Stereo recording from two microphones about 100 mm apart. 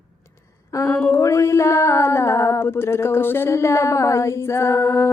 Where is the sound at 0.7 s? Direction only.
25° left (ahead or behind).